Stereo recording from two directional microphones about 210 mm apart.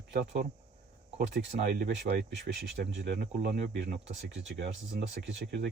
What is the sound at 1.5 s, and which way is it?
Speech, 40° right (ahead or behind).